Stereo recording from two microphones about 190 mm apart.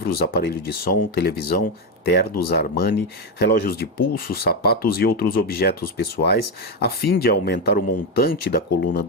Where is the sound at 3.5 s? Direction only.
55° left (ahead or behind).